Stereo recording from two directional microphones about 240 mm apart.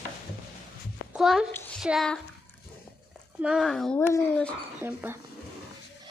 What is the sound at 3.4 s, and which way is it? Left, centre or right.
Speech, centre.